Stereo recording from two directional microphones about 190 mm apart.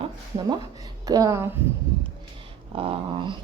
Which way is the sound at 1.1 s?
20° right (ahead or behind).